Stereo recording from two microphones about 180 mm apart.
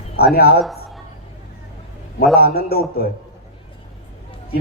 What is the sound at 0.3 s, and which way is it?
Speech, 60° left (ahead or behind).